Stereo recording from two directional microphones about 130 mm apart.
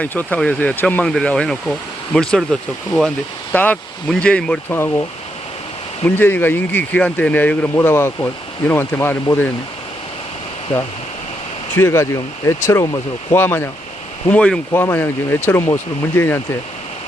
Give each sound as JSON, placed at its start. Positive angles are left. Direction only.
{"t": 0.0, "sound": "speech", "side_deg": 10}
{"t": 4.7, "sound": "speech", "side_deg": 20}
{"t": 6.1, "sound": "speech", "side_deg": 15}
{"t": 11.7, "sound": "speech", "side_deg": 20}